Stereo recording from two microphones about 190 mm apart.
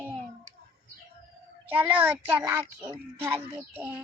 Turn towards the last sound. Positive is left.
turn(degrees=-10)  # may be behind; listen again after turning